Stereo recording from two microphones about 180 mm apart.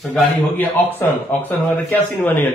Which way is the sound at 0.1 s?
5° left (ahead or behind).